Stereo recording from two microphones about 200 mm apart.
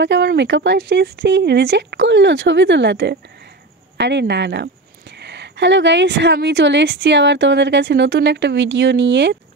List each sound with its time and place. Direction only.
0.0 s speech: 60° right (ahead or behind)